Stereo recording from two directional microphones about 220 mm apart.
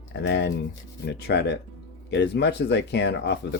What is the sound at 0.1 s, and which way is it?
Speech, 50° left (ahead or behind).